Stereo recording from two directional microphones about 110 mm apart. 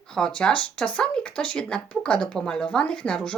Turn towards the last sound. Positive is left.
turn(degrees=10)  # may be behind; listen again after turning